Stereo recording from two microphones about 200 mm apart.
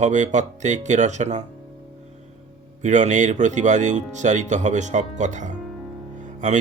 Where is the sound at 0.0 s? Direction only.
35° right (ahead or behind).